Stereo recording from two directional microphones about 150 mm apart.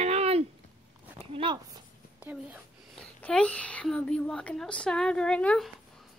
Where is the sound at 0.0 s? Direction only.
45° right (ahead or behind).